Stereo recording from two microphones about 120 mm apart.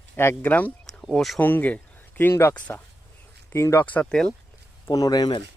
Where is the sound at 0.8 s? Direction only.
Centre (ahead or behind).